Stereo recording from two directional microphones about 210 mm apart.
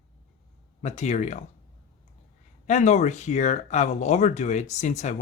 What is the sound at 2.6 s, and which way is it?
Speech, 35° left (ahead or behind).